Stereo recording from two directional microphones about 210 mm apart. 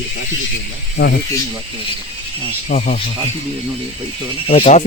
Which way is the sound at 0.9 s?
50° left (ahead or behind).